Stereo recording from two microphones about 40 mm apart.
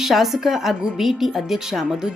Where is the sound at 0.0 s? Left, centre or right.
Centre.